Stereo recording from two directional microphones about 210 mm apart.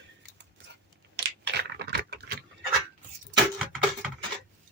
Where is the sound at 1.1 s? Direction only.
50° right (ahead or behind).